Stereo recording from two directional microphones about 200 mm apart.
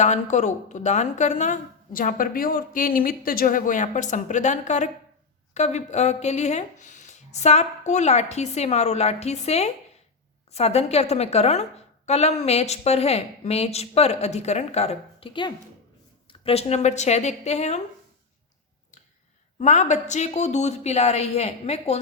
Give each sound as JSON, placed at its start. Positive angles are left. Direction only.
{"t": 0.0, "sound": "speech", "side_deg": 35}
{"t": 19.5, "sound": "speech", "side_deg": 35}